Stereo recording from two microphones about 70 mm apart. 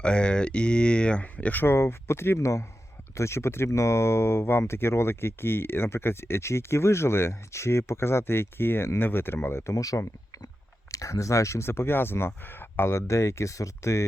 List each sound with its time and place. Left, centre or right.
0.0 s speech: centre
1.6 s speech: left
9.7 s speech: left